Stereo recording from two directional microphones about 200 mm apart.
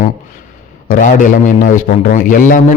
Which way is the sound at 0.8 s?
40° left (ahead or behind).